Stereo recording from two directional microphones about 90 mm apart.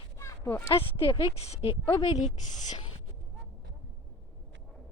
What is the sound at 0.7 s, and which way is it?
Speech, 90° left.